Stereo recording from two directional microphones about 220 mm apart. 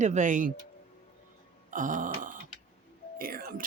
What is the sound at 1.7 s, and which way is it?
Speech, 35° right (ahead or behind).